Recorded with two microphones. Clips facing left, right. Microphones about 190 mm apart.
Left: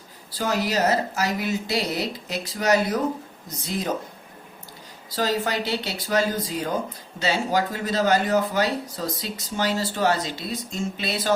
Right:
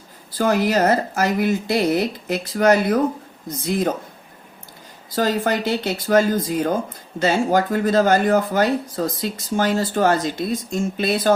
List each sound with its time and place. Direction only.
0.3 s speech: 55° right (ahead or behind)
5.1 s speech: 50° right (ahead or behind)